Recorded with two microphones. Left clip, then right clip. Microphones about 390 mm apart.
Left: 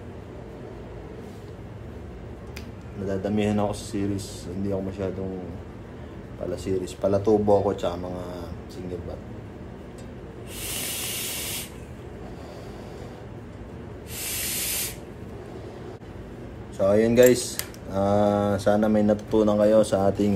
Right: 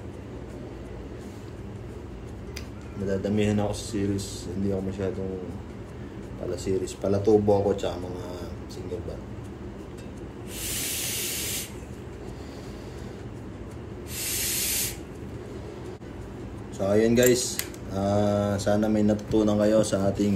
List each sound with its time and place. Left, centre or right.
3.1 s speech: centre
6.5 s speech: centre
16.7 s speech: centre